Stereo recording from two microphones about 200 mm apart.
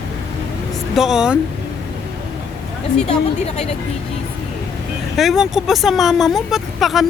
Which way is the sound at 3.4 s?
30° left (ahead or behind).